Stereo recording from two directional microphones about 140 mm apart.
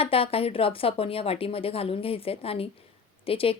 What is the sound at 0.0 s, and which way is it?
A woman's voice, 40° left (ahead or behind).